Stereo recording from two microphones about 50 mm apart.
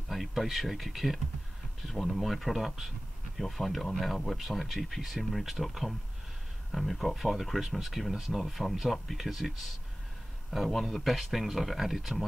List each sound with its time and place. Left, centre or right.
0.1 s speech: centre
10.5 s speech: centre